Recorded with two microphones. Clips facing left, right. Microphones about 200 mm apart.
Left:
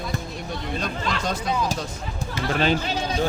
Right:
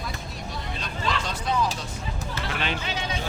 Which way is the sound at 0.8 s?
45° left (ahead or behind).